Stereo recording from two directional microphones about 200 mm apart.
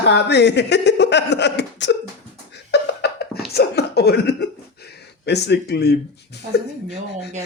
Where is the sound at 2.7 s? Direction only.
55° left (ahead or behind).